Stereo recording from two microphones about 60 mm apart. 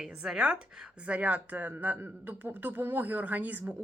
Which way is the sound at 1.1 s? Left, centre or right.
Right.